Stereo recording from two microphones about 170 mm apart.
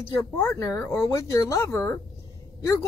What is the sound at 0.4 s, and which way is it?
A man's voice, 15° left (ahead or behind).